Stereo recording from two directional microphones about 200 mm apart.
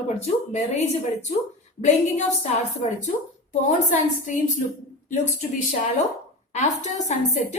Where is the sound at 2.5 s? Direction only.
35° left (ahead or behind).